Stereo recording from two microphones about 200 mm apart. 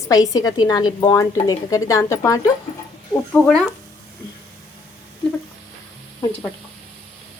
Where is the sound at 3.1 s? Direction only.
Centre (ahead or behind).